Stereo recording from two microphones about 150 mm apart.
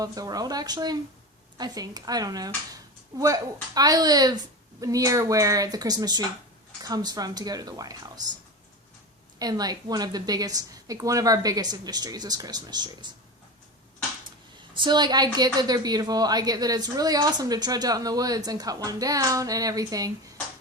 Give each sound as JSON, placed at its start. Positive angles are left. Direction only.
{"t": 0.0, "sound": "speech", "side_deg": -25}
{"t": 9.4, "sound": "speech", "side_deg": -25}
{"t": 14.7, "sound": "a woman's voice", "side_deg": -30}